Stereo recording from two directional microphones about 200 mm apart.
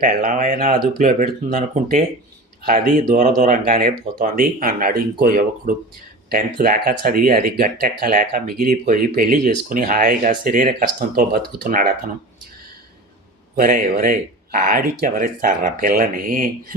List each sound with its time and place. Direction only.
0.0 s speech: 45° right (ahead or behind)
13.6 s speech: 45° right (ahead or behind)